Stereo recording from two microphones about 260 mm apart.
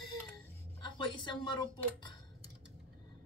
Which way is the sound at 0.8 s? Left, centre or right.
Centre.